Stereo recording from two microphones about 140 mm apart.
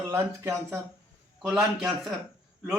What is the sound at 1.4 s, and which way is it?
Speech, 5° right (ahead or behind).